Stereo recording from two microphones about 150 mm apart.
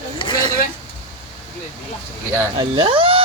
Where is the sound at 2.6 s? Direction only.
35° right (ahead or behind).